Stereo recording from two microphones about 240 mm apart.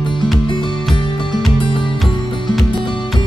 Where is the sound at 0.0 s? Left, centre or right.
Centre.